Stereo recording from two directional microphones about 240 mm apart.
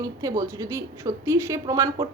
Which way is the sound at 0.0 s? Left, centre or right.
Centre.